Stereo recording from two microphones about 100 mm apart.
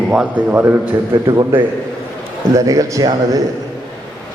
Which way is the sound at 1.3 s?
45° right (ahead or behind).